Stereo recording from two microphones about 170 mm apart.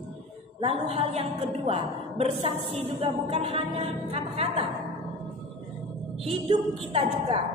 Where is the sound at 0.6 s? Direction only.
35° right (ahead or behind).